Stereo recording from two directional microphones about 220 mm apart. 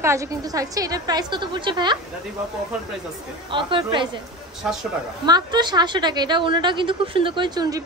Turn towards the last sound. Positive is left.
turn(degrees=-15)  # may be behind; listen again after turning